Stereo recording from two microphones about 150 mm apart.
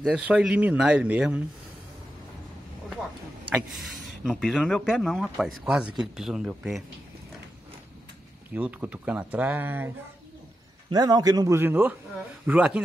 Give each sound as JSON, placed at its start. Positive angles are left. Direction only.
{"t": 0.0, "sound": "speech", "side_deg": -5}
{"t": 3.4, "sound": "speech", "side_deg": 0}
{"t": 8.5, "sound": "speech", "side_deg": -10}
{"t": 10.9, "sound": "a man's voice", "side_deg": -25}